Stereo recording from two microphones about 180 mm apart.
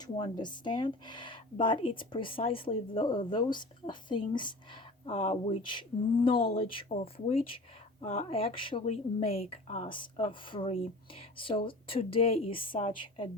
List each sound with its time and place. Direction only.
0.0 s speech: 25° left (ahead or behind)